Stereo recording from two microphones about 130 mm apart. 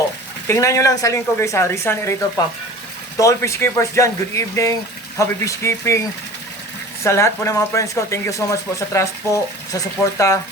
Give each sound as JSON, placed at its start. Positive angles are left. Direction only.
{"t": 0.4, "sound": "speech", "side_deg": 25}
{"t": 3.2, "sound": "speech", "side_deg": 25}